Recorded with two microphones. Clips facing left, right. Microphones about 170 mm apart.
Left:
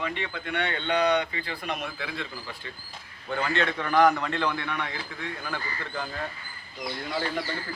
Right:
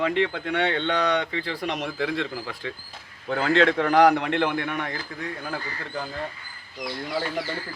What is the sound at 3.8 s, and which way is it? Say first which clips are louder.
A man's voice: right 4 dB; 80° right.